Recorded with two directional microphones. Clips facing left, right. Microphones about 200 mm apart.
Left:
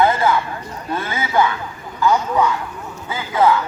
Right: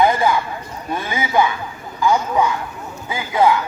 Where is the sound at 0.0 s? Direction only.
15° right (ahead or behind).